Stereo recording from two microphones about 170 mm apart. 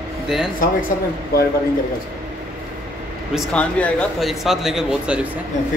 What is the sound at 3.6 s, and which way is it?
A man's voice, 5° left (ahead or behind).